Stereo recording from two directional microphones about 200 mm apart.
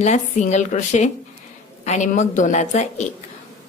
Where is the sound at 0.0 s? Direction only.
35° left (ahead or behind).